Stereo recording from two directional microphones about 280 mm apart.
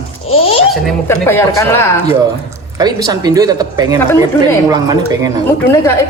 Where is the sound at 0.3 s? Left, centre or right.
Left.